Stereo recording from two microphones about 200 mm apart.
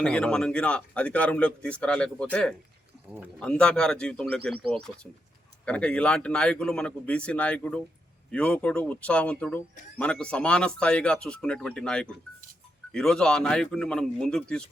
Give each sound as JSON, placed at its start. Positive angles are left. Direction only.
{"t": 0.0, "sound": "speech", "side_deg": 5}